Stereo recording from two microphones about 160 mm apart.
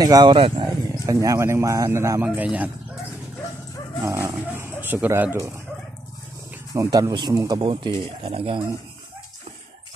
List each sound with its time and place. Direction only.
0.0 s speech: 25° right (ahead or behind); by 2.7 s 10° right (ahead or behind)
4.0 s speech: 20° right (ahead or behind)
6.7 s speech: 20° right (ahead or behind)